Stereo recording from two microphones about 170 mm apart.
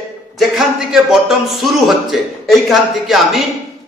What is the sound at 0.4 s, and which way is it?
Speech, centre (ahead or behind).